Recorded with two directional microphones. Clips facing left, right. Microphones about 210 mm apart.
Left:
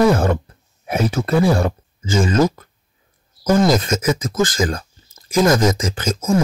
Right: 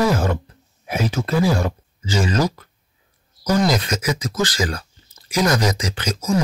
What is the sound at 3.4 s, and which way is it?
Speech, 50° left (ahead or behind).